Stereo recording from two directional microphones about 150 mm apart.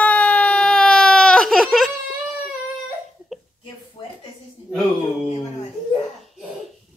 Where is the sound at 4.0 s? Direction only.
30° left (ahead or behind).